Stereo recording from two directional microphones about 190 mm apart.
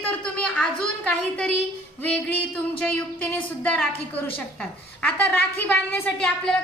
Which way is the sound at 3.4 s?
5° left (ahead or behind).